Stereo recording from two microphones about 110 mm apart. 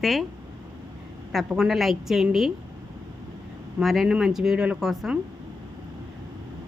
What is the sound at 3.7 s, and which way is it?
A woman's voice, centre (ahead or behind).